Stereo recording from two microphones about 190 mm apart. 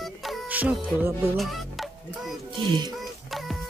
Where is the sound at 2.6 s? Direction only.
25° right (ahead or behind).